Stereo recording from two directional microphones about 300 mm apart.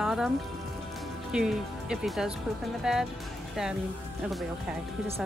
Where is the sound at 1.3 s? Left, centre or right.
Centre.